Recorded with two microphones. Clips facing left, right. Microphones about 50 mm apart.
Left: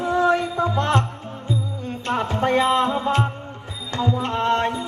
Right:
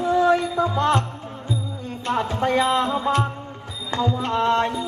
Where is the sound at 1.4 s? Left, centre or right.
Centre.